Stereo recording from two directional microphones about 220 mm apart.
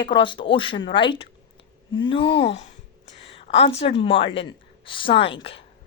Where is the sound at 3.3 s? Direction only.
25° left (ahead or behind).